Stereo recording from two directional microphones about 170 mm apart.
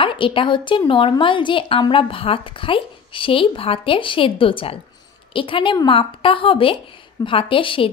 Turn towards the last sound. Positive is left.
turn(degrees=30)  # may be behind; listen again after turning